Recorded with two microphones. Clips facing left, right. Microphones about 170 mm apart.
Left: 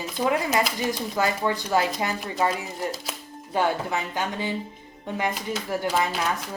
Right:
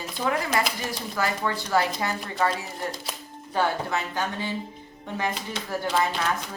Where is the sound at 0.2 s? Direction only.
20° left (ahead or behind).